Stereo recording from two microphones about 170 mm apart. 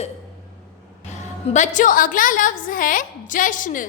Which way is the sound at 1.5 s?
45° left (ahead or behind).